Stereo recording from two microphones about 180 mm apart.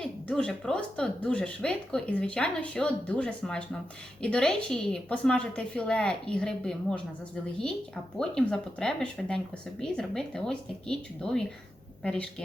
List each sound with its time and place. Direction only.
0.0 s speech: 5° left (ahead or behind)
8.2 s speech: 5° left (ahead or behind)